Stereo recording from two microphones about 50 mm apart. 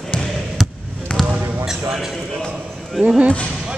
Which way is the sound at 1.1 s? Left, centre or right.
Centre.